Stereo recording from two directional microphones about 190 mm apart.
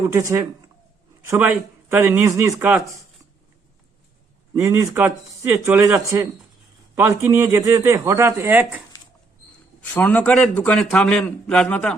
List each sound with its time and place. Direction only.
0.1 s speech: 15° right (ahead or behind)
4.5 s speech: 15° right (ahead or behind)
9.8 s a man's voice: 10° left (ahead or behind)